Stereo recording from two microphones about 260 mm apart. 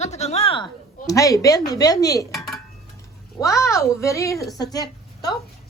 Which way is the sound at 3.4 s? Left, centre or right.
Centre.